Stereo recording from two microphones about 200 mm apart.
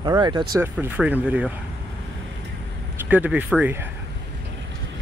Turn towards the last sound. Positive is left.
turn(degrees=-10)  # may be behind; listen again after turning